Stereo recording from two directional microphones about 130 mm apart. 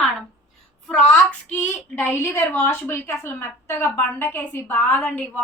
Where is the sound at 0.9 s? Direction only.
5° left (ahead or behind).